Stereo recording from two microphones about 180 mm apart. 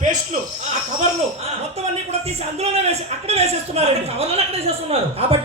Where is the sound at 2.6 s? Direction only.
35° right (ahead or behind).